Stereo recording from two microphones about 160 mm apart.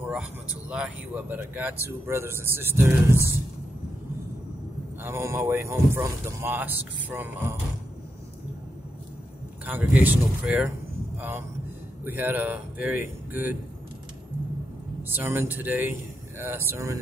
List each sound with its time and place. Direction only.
0.7 s a man's voice: 5° right (ahead or behind)
5.0 s a man's voice: 15° right (ahead or behind)
9.7 s a man's voice: 10° right (ahead or behind)
15.0 s a man's voice: 15° right (ahead or behind)